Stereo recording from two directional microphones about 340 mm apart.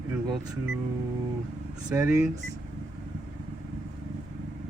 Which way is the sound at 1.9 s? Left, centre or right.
Centre.